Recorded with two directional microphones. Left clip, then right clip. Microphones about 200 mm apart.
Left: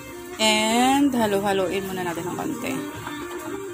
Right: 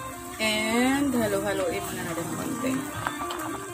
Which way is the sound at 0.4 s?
20° left (ahead or behind).